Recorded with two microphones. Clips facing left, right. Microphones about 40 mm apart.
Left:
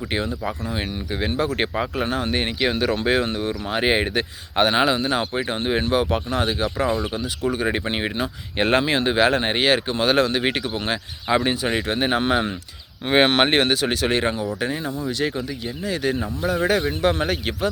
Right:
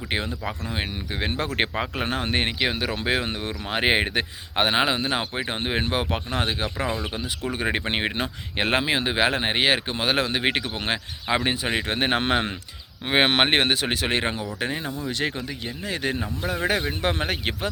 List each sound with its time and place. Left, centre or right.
0.4 s speech: right
2.0 s speech: right
2.6 s speech: centre
3.4 s speech: right
8.5 s speech: centre; by 11.0 s right
11.3 s speech: centre
11.9 s speech: right
13.1 s speech: centre
15.2 s speech: right